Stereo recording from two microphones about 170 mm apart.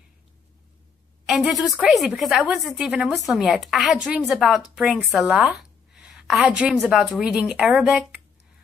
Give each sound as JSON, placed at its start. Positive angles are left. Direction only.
{"t": 1.2, "sound": "a woman's voice", "side_deg": 0}